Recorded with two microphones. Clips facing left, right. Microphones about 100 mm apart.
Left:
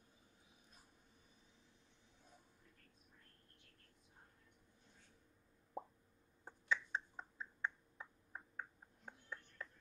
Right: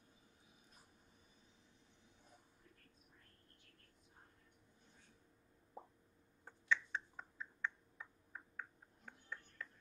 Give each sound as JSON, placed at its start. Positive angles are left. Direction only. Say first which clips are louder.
{"t": 6.4, "sound": "finger snapping", "louder": "right 2 dB", "side_deg": 30}